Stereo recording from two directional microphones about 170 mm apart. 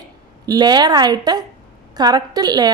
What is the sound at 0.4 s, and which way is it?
A woman's voice, 25° right (ahead or behind).